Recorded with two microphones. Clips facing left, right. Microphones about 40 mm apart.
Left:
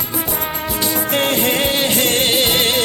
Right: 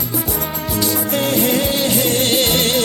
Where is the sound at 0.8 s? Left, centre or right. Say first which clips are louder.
Even; left.